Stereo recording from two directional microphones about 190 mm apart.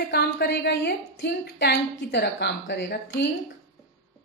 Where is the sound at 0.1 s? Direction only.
60° left (ahead or behind).